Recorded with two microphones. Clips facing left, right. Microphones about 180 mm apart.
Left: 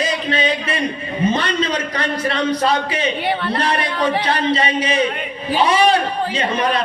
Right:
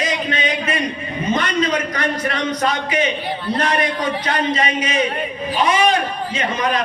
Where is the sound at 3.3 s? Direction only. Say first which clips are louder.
Left 2 dB; 70° left (ahead or behind).